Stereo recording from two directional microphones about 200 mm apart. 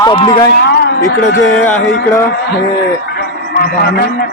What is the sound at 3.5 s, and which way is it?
Speech, 50° left (ahead or behind).